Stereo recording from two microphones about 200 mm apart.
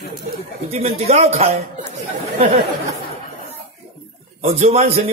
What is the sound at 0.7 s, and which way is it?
Speech, 35° right (ahead or behind).